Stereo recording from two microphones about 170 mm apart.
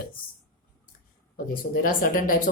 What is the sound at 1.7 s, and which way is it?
Speech, 55° left (ahead or behind).